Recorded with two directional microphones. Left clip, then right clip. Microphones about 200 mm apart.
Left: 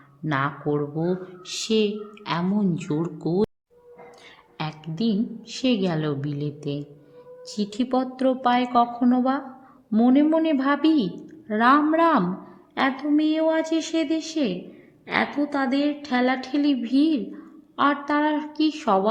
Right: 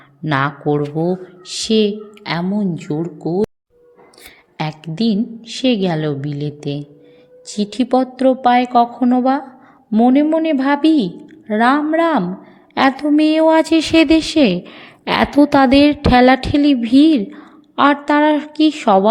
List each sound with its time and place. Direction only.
0.3 s a woman's voice: 20° right (ahead or behind)
4.5 s a woman's voice: 20° right (ahead or behind)
12.7 s a woman's voice: 25° right (ahead or behind)